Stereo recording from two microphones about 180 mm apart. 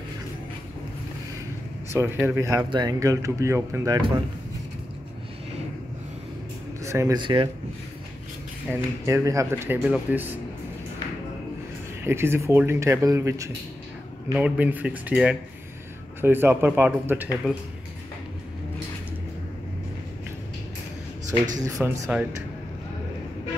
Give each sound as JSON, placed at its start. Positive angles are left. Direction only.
{"t": 1.9, "sound": "speech", "side_deg": -15}
{"t": 6.8, "sound": "speech", "side_deg": -15}
{"t": 8.7, "sound": "speech", "side_deg": 5}
{"t": 9.0, "sound": "speech", "side_deg": -15}
{"t": 12.0, "sound": "speech", "side_deg": -15}
{"t": 21.5, "sound": "speech", "side_deg": -15}